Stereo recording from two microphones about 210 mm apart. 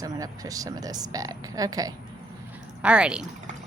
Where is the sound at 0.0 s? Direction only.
15° right (ahead or behind).